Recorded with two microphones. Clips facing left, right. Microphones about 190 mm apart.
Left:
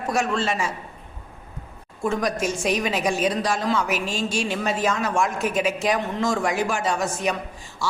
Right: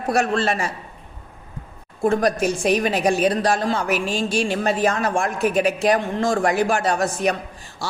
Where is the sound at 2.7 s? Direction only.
60° right (ahead or behind).